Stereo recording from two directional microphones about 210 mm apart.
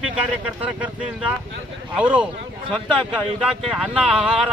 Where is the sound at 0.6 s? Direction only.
5° right (ahead or behind).